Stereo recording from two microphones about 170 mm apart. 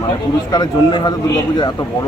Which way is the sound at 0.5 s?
25° left (ahead or behind).